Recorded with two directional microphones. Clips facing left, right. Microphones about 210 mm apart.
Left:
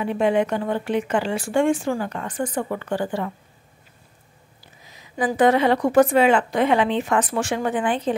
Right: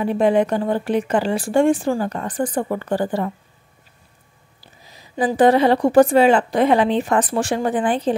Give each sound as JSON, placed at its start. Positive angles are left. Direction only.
{"t": 0.0, "sound": "a woman's voice", "side_deg": -35}
{"t": 4.6, "sound": "a woman's voice", "side_deg": -35}